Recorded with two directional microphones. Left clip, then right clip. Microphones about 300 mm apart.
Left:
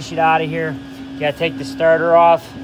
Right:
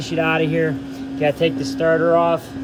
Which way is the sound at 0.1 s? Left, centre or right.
Centre.